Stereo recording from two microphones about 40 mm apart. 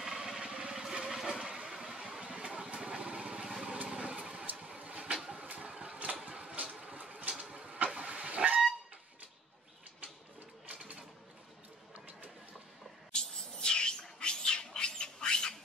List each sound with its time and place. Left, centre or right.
0.0 s vehicle: centre
0.4 s vehicle: right
3.4 s vehicle: centre
3.7 s vehicle: right
6.5 s a sound: right
7.3 s vehicle: right
10.7 s a sound: right
13.1 s vehicle: left
14.2 s cat: left